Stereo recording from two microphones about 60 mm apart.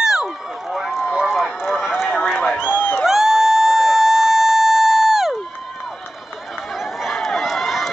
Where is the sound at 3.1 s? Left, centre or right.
Centre.